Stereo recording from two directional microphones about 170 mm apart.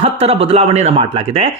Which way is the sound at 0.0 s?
35° right (ahead or behind).